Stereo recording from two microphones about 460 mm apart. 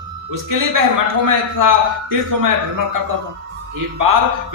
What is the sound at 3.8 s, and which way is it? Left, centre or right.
Speech, right.